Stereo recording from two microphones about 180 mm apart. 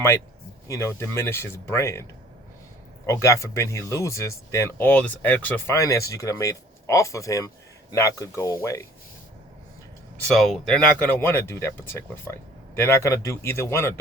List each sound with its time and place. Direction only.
0.7 s speech: 15° left (ahead or behind)
3.1 s speech: 15° left (ahead or behind)
10.2 s speech: centre (ahead or behind)